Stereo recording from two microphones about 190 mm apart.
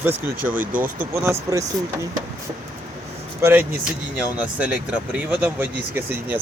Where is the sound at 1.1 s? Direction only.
15° right (ahead or behind).